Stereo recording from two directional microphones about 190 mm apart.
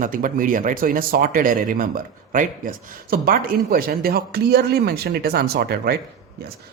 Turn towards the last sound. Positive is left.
turn(degrees=-55)  # may be behind; listen again after turning